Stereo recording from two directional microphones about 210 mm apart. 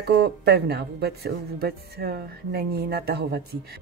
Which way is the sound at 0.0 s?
50° right (ahead or behind).